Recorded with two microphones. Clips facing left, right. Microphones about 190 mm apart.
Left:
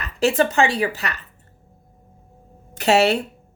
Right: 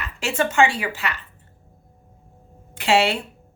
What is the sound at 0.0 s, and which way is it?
A woman's voice, 35° left (ahead or behind).